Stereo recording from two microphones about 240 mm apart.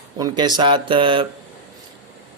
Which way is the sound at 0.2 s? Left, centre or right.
Centre.